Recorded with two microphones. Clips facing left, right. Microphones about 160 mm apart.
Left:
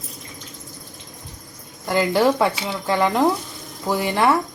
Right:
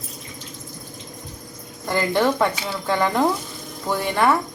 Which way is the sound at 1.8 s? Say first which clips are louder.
Left 2 dB; 5° left (ahead or behind).